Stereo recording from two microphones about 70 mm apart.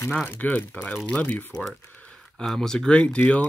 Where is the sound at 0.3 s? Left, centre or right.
Left.